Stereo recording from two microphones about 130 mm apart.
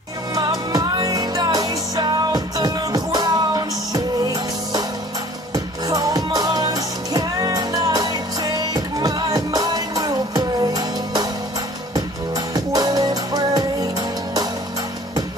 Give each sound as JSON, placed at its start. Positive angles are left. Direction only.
{"t": 0.3, "sound": "music", "side_deg": -30}
{"t": 12.5, "sound": "music", "side_deg": -30}